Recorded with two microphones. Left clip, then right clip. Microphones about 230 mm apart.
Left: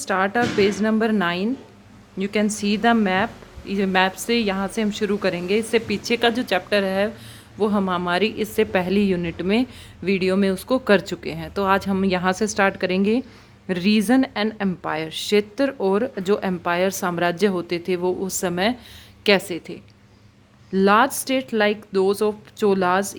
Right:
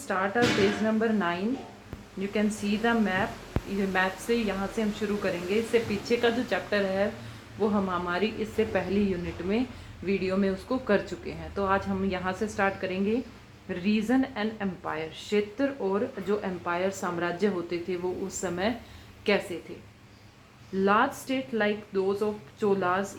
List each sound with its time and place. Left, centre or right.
0.0 s a woman's voice: left
20.7 s a woman's voice: left